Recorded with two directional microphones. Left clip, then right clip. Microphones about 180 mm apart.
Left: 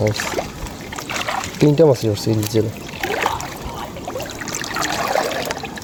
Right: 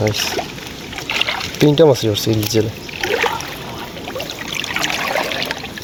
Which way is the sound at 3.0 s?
50° left (ahead or behind).